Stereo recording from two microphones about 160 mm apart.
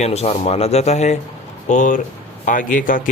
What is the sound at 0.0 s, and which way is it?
Speech, 40° left (ahead or behind).